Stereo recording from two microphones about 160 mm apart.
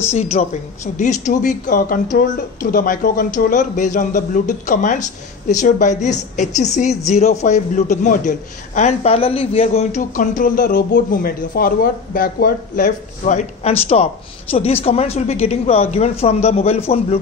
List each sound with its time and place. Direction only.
0.1 s speech: 40° left (ahead or behind)
10.1 s speech: 60° left (ahead or behind); by 17.2 s 40° left (ahead or behind)